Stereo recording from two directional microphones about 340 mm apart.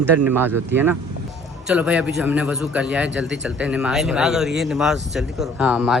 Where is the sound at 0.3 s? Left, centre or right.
Centre.